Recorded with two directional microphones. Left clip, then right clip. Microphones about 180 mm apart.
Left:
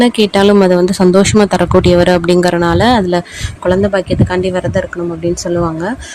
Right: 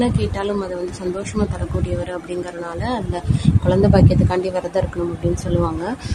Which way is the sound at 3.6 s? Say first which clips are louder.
Left 5 dB; 20° left (ahead or behind).